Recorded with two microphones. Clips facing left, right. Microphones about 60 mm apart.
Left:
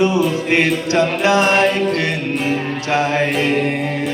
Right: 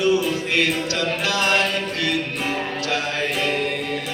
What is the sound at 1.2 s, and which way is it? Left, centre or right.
Music, left.